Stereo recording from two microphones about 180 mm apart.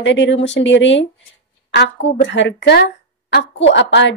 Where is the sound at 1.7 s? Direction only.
75° left (ahead or behind).